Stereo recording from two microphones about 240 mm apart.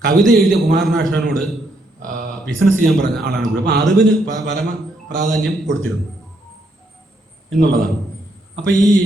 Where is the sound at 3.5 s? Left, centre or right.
Right.